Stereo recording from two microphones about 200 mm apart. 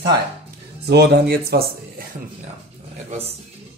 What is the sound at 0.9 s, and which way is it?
Speech, 55° right (ahead or behind).